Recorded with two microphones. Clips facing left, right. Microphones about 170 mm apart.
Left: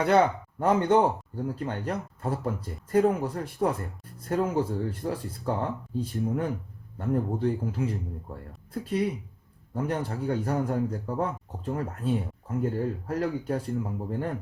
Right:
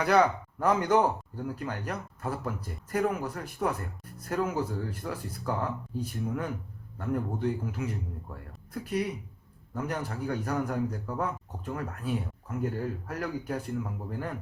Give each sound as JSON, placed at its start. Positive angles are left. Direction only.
{"t": 0.0, "sound": "speech", "side_deg": 25}